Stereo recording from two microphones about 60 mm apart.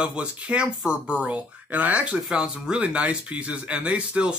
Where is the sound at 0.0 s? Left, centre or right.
Centre.